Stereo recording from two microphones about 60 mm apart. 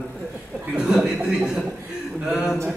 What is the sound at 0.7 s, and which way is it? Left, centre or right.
A man's voice, centre.